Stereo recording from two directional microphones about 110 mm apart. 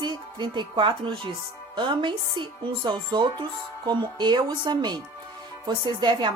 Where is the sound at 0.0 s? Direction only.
45° right (ahead or behind).